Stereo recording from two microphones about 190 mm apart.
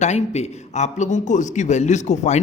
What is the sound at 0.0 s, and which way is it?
A man's voice, 35° left (ahead or behind).